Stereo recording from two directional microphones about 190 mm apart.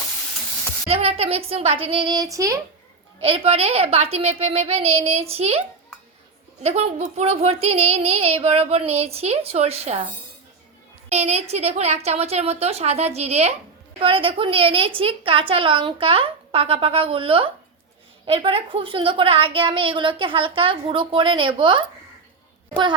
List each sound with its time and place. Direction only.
0.9 s a woman's voice: 30° right (ahead or behind); by 2.6 s 15° right (ahead or behind)
3.2 s speech: 30° right (ahead or behind)
11.1 s a woman's voice: 35° right (ahead or behind)